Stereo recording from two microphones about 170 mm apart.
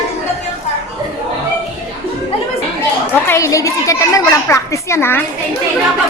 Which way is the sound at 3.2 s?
15° left (ahead or behind).